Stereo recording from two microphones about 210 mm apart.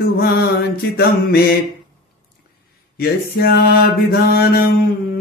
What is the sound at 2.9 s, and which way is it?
Mantra, 50° left (ahead or behind).